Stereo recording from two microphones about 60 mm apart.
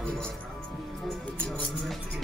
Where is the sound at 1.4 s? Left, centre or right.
Centre.